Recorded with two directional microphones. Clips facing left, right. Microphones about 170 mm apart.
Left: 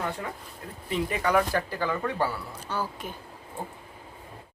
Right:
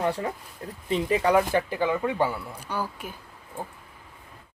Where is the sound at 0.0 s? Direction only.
35° right (ahead or behind); by 3.2 s 10° right (ahead or behind).